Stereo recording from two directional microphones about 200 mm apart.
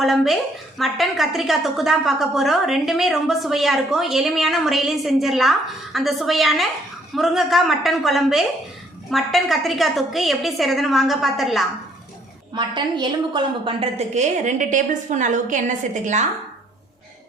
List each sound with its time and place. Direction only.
0.0 s a woman's voice: centre (ahead or behind)
12.5 s a woman's voice: 25° right (ahead or behind); by 16.2 s 40° right (ahead or behind)